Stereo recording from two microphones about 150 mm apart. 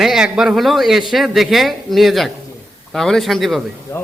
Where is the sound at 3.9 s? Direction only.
15° left (ahead or behind).